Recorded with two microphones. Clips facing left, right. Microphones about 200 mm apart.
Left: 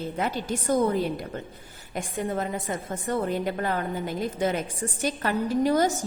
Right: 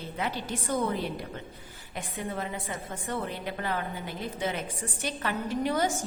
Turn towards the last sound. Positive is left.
turn(degrees=40)  # may be behind; listen again after turning